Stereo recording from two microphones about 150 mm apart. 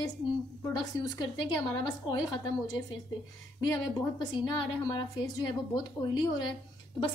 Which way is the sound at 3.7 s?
25° left (ahead or behind).